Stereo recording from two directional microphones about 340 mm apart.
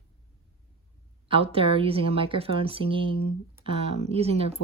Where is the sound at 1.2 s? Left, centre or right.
Centre.